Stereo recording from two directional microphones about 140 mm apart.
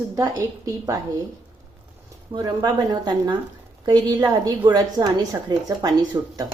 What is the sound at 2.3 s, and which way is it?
Speech, 25° right (ahead or behind).